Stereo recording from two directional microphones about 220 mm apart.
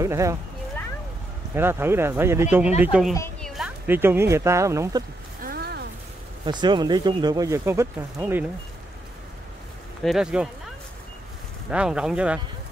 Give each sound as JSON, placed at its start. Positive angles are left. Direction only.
{"t": 0.0, "sound": "speech", "side_deg": -15}
{"t": 1.5, "sound": "speech", "side_deg": -10}
{"t": 5.4, "sound": "a sound", "side_deg": -45}
{"t": 6.4, "sound": "speech", "side_deg": -20}
{"t": 10.0, "sound": "speech", "side_deg": -5}
{"t": 11.7, "sound": "speech", "side_deg": -5}